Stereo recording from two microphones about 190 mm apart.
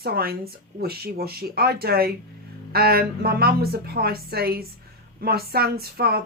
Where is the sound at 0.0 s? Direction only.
55° right (ahead or behind).